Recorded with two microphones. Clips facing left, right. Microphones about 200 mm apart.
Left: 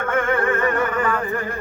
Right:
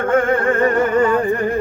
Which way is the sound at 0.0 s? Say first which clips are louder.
Right 5 dB; 30° right (ahead or behind).